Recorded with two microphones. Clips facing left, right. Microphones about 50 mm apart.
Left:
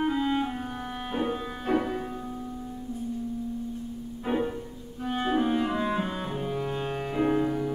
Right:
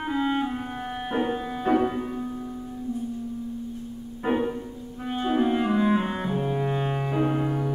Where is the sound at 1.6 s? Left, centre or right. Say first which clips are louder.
Right 5 dB; right.